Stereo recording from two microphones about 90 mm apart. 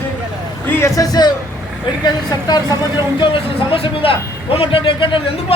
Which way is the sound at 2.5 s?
60° left (ahead or behind).